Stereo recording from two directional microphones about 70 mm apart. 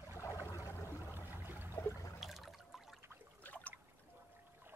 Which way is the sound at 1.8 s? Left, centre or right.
Left.